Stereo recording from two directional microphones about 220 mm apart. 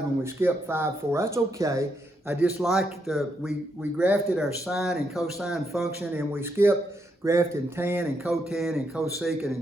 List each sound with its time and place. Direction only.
0.2 s speech: 10° right (ahead or behind)